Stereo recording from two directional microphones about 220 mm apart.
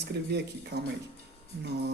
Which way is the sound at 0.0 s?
50° right (ahead or behind).